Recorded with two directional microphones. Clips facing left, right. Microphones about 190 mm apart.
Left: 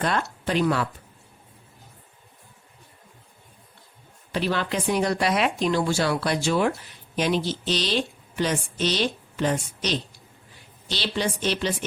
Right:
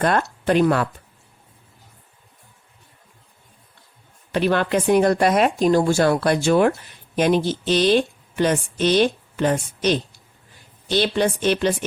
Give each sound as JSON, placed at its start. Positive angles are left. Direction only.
{"t": 0.0, "sound": "speech", "side_deg": -50}
{"t": 4.3, "sound": "a woman's voice", "side_deg": -55}